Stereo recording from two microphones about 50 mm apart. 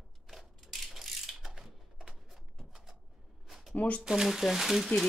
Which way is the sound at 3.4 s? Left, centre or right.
Centre.